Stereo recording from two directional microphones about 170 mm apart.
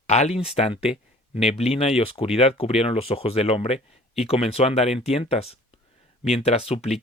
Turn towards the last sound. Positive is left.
turn(degrees=40)  # may be behind; listen again after turning